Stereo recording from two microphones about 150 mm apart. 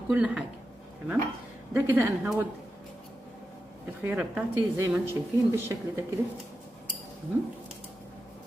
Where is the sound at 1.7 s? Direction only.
15° right (ahead or behind).